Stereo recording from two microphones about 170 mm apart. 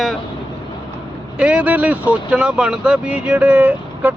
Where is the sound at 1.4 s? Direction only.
5° right (ahead or behind).